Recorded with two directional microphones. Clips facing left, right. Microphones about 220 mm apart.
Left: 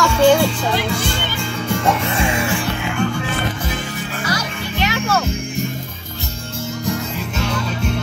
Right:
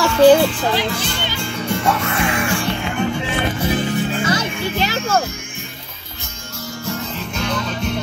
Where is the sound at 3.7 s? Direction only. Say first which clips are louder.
Right 7 dB; 25° right (ahead or behind).